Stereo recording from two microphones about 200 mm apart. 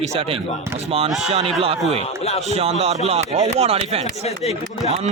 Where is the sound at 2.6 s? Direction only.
30° right (ahead or behind).